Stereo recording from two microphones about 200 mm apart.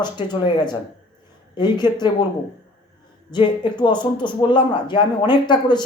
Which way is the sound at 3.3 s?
25° left (ahead or behind).